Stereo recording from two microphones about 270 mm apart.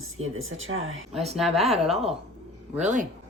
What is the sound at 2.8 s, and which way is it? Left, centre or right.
Speech, right.